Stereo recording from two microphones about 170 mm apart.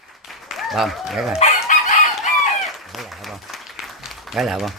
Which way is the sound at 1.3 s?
40° left (ahead or behind).